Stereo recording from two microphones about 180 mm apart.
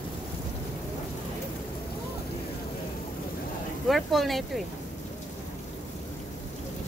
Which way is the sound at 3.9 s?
Centre (ahead or behind).